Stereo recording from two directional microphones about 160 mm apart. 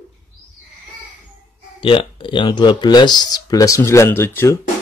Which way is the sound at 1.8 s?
30° left (ahead or behind).